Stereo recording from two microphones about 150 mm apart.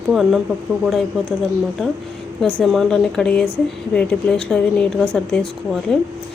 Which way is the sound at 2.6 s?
Centre (ahead or behind).